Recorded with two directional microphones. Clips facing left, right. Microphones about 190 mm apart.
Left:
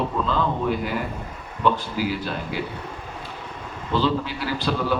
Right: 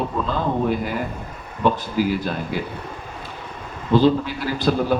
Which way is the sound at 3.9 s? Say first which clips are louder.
Right 6 dB; 45° right (ahead or behind).